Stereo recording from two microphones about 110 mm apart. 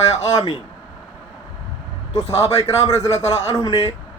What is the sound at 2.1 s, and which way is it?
A man's voice, 65° left (ahead or behind).